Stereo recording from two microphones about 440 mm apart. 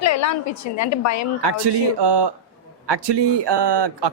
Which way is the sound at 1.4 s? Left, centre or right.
Right.